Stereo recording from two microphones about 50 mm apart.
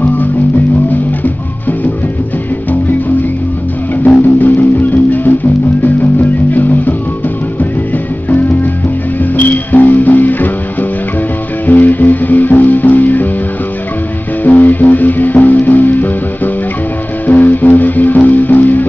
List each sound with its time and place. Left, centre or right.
4.1 s music: left
8.3 s music: left
14.4 s music: left
17.3 s music: left